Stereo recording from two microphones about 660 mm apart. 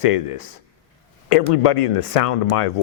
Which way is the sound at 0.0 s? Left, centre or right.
Left.